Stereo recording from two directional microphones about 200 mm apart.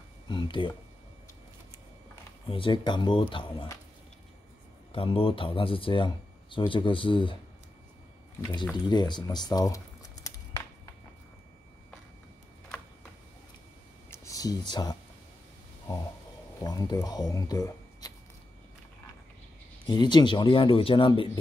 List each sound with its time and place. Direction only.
0.3 s speech: 25° left (ahead or behind)
2.4 s speech: 25° left (ahead or behind)
4.9 s speech: 25° left (ahead or behind)
8.8 s speech: 20° left (ahead or behind)
14.1 s speech: 15° left (ahead or behind)
16.6 s speech: 20° left (ahead or behind)
19.9 s speech: 20° left (ahead or behind)